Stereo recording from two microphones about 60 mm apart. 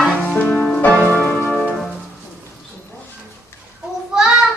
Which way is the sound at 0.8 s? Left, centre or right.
Left.